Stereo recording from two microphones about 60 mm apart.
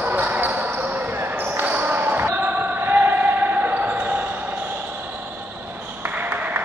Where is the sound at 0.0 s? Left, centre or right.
Right.